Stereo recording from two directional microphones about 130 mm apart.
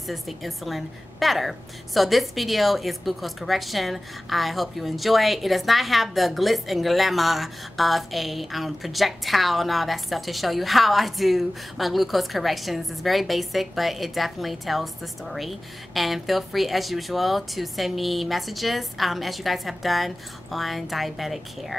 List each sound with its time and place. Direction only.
0.1 s a woman's voice: centre (ahead or behind)